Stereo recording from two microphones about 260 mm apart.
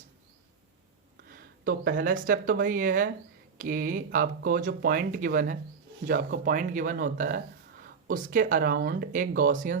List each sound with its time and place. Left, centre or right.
1.3 s speech: right